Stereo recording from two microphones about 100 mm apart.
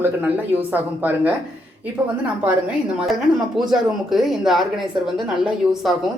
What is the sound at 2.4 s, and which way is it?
Speech, 15° right (ahead or behind).